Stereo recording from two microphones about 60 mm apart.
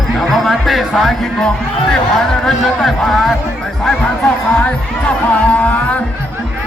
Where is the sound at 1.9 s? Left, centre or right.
Centre.